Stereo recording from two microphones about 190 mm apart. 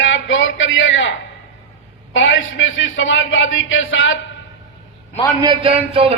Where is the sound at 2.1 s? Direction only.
80° left.